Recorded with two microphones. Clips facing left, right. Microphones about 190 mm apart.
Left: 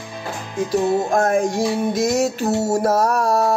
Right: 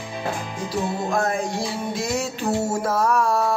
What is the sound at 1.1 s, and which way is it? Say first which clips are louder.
Music: left 6 dB; 45° left (ahead or behind).